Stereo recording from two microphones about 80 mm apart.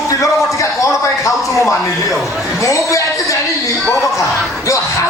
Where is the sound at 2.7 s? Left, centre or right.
Left.